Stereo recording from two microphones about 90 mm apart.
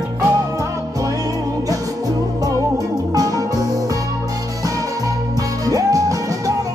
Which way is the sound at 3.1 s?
40° right (ahead or behind).